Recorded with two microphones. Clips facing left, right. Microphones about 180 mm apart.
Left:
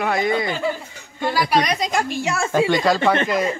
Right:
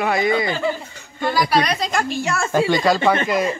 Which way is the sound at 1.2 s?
10° left (ahead or behind).